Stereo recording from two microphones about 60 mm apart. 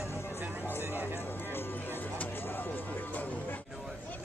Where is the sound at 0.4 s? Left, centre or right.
Right.